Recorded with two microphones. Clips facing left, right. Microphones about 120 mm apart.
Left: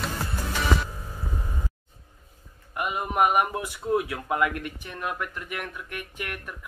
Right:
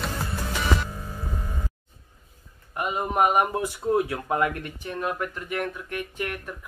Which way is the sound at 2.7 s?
25° right (ahead or behind).